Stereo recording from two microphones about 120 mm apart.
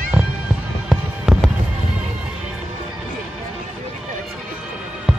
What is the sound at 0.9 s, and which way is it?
Fireworks, centre (ahead or behind).